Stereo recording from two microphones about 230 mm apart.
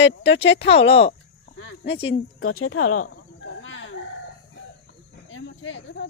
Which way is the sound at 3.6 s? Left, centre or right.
Left.